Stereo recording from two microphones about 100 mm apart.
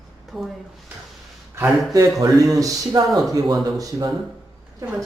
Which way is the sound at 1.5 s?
30° right (ahead or behind).